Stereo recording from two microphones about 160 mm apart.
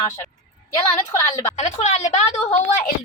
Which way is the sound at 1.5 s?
45° left (ahead or behind).